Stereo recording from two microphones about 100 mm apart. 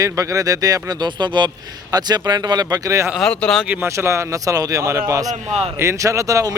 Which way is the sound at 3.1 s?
5° left (ahead or behind).